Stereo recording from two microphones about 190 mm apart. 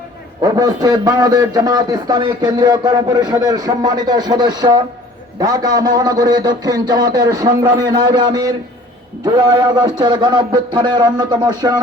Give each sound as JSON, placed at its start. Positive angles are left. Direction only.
{"t": 0.4, "sound": "a man's voice", "side_deg": -20}
{"t": 9.7, "sound": "a man's voice", "side_deg": -25}